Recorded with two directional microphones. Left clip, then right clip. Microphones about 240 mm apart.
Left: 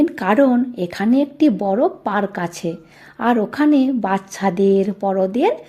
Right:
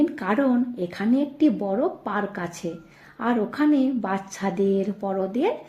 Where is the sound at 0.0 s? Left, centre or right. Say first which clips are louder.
Left 8 dB; left.